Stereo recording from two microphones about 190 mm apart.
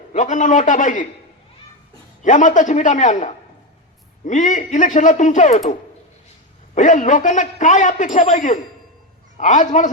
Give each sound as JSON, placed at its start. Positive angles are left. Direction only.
{"t": 0.1, "sound": "a man's voice", "side_deg": 40}
{"t": 2.2, "sound": "a man's voice", "side_deg": 40}
{"t": 6.7, "sound": "a man's voice", "side_deg": 40}